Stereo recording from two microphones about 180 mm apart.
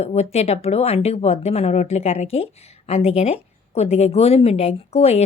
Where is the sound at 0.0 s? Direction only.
35° left (ahead or behind).